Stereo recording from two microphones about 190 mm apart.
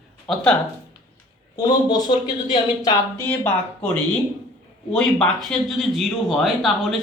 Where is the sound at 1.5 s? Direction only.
20° left (ahead or behind).